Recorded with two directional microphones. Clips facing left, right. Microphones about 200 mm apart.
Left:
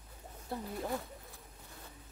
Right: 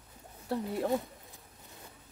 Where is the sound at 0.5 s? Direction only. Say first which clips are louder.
Right 7 dB; 70° right (ahead or behind).